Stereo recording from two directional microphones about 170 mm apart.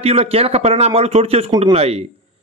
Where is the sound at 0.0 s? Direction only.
35° right (ahead or behind).